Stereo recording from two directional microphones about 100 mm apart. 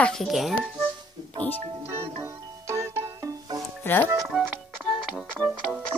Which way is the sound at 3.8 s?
25° left (ahead or behind).